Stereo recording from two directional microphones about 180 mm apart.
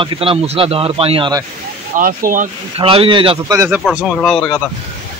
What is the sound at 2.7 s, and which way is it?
Speech, 30° right (ahead or behind).